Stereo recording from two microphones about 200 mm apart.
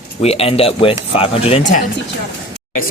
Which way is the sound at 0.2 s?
30° left (ahead or behind).